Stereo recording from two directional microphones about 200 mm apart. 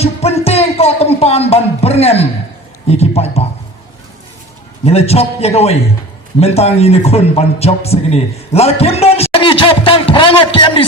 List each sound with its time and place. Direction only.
0.0 s a sound: 30° left (ahead or behind)
2.8 s speech: 30° left (ahead or behind)
4.9 s a man's voice: 30° left (ahead or behind)